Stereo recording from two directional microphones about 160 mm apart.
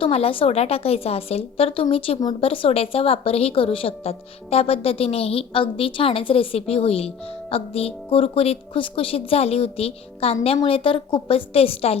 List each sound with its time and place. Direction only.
0.0 s a woman's voice: 35° left (ahead or behind)